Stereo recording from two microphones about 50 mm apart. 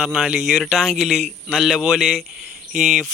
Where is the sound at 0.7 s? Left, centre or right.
Centre.